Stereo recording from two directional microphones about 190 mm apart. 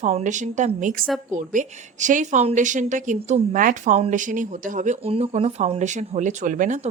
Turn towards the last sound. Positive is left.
turn(degrees=-40)  # may be behind; listen again after turning